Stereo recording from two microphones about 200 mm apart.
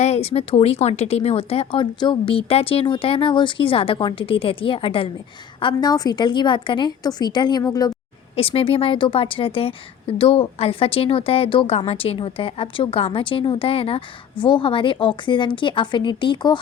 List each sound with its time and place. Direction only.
0.0 s speech: 30° left (ahead or behind)